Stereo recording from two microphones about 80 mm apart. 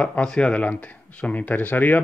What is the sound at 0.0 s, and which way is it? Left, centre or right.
Speech, centre.